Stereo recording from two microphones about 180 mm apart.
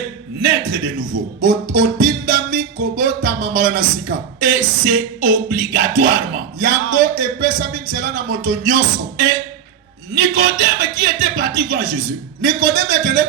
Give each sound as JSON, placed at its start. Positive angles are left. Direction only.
{"t": 0.4, "sound": "speech", "side_deg": -55}